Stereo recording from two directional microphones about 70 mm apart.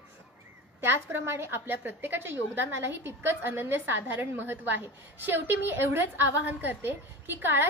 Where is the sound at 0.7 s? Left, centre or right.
Right.